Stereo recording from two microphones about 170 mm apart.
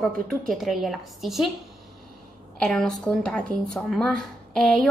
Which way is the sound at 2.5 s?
5° left (ahead or behind).